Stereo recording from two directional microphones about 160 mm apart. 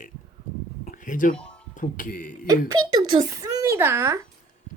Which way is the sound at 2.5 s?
25° right (ahead or behind).